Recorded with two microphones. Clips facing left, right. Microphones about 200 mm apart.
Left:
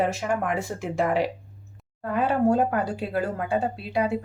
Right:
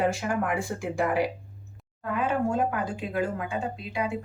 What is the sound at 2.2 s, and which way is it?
A woman's voice, 35° left (ahead or behind).